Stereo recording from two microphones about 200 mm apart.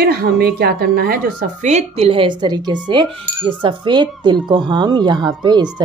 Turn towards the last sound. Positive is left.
turn(degrees=-20)  # may be behind; listen again after turning